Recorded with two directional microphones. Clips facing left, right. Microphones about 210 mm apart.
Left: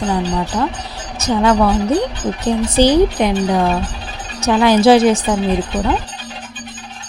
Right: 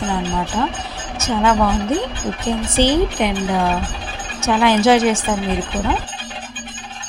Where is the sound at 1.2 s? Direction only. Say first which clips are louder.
Left 3 dB; 40° left (ahead or behind).